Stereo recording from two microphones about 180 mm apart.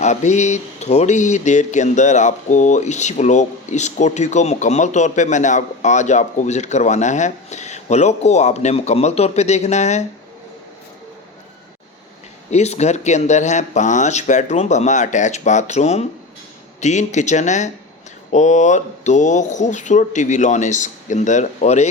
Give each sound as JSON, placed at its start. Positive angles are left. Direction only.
{"t": 0.0, "sound": "speech", "side_deg": 40}
{"t": 12.5, "sound": "speech", "side_deg": 35}